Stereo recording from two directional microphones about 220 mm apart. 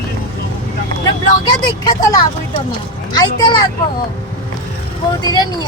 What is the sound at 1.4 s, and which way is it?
Speech, 15° left (ahead or behind).